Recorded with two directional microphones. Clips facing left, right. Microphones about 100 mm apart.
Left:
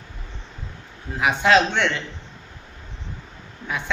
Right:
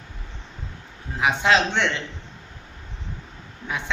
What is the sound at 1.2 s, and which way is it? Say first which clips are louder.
Speech: left 2 dB; 20° right (ahead or behind).